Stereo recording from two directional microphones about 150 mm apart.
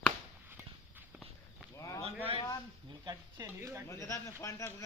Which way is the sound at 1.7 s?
20° left (ahead or behind).